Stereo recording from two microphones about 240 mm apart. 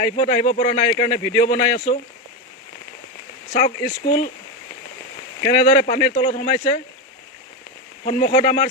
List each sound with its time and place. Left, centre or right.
0.0 s speech: left
3.8 s speech: left
5.4 s speech: left
8.0 s speech: left